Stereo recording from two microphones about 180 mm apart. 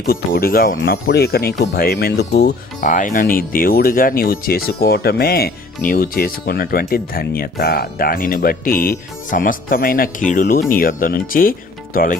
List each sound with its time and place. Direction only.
0.1 s speech: 55° left (ahead or behind)
2.8 s speech: 45° left (ahead or behind)